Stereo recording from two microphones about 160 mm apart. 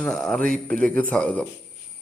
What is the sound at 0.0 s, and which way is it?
Mantra, 5° left (ahead or behind).